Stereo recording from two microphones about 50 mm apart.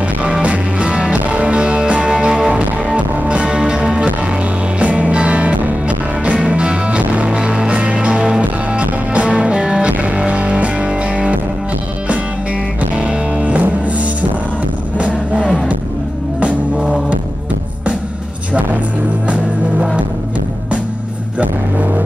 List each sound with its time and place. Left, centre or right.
0.2 s music: right
4.7 s music: right
12.9 s music: right